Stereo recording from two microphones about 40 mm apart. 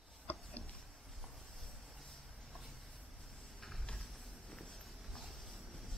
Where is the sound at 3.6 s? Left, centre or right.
Centre.